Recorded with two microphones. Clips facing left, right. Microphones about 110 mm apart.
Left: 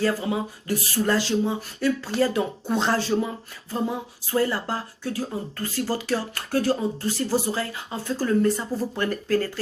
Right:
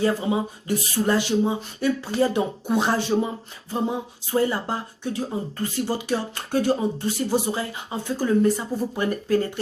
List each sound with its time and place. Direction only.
0.0 s speech: 20° right (ahead or behind)